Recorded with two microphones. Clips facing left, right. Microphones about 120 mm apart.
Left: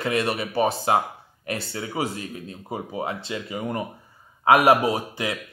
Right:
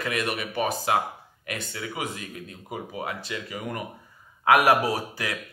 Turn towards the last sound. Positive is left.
turn(degrees=25)  # may be behind; listen again after turning